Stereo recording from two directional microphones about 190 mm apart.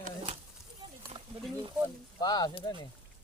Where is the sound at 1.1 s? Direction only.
35° right (ahead or behind).